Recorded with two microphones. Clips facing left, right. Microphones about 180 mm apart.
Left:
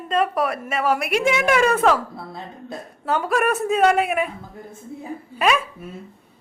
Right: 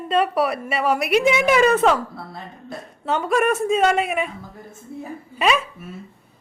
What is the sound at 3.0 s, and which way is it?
Speech, centre (ahead or behind).